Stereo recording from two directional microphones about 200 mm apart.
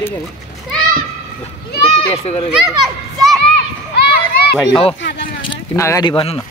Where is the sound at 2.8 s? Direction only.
Centre (ahead or behind).